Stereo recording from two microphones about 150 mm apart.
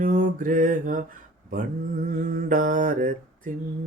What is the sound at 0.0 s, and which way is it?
Mantra, 60° right (ahead or behind).